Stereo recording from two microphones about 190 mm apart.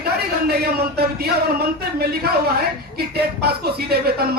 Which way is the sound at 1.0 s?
55° right (ahead or behind).